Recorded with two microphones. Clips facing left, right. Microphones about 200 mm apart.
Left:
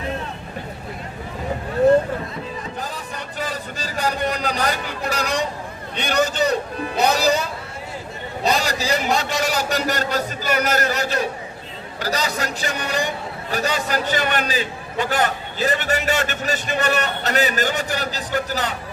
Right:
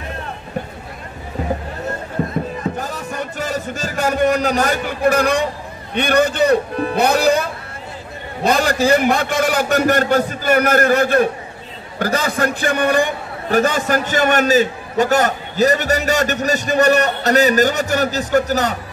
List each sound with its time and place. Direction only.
2.6 s a sound: 50° right (ahead or behind)
5.9 s a man's voice: 55° right (ahead or behind)
8.5 s a man's voice: 55° right (ahead or behind)